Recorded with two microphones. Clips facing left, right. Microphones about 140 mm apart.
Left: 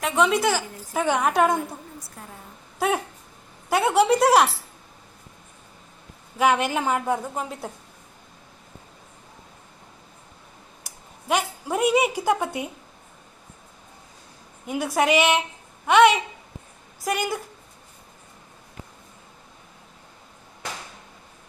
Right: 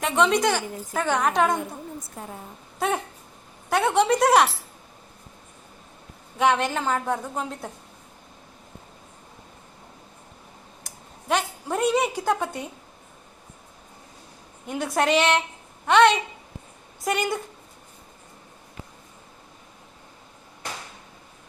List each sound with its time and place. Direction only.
0.0 s a woman's voice: centre (ahead or behind)
2.2 s a woman's voice: 25° right (ahead or behind)
2.7 s dog: 5° left (ahead or behind)
3.7 s speech: 5° left (ahead or behind)
6.3 s a woman's voice: 5° left (ahead or behind)
10.8 s a woman's voice: 5° left (ahead or behind)
14.7 s a woman's voice: 5° left (ahead or behind)